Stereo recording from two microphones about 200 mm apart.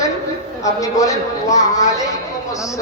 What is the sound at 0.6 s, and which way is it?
Speech, 15° left (ahead or behind).